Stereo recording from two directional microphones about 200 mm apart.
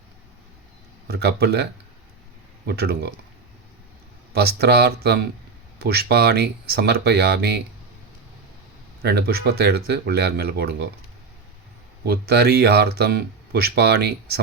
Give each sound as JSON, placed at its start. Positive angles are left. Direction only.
{"t": 1.0, "sound": "speech", "side_deg": -55}
{"t": 2.6, "sound": "speech", "side_deg": -55}
{"t": 4.3, "sound": "speech", "side_deg": -55}
{"t": 9.0, "sound": "speech", "side_deg": -55}
{"t": 12.0, "sound": "speech", "side_deg": -50}